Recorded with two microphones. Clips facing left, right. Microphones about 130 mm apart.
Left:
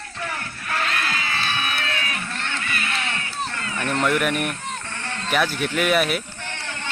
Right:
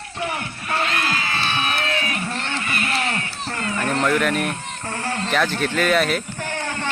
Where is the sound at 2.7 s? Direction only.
35° right (ahead or behind).